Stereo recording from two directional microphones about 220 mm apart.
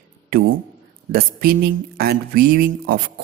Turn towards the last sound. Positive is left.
turn(degrees=-40)  # may be behind; listen again after turning